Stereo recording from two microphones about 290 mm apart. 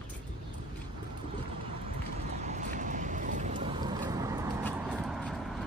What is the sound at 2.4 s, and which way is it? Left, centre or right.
Boat, right.